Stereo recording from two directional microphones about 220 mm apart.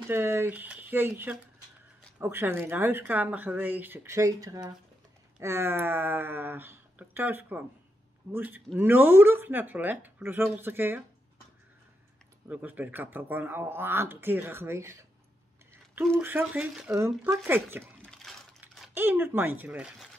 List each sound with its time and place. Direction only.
0.1 s speech: 10° right (ahead or behind)
12.4 s speech: 10° right (ahead or behind)
18.0 s crumpling: centre (ahead or behind)